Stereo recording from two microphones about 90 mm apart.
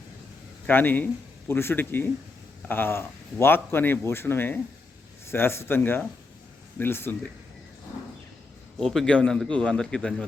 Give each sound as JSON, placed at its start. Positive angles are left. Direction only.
{"t": 0.7, "sound": "speech", "side_deg": 20}
{"t": 8.8, "sound": "a man's voice", "side_deg": 5}